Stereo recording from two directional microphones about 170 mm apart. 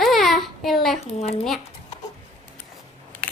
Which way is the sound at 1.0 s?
40° left (ahead or behind).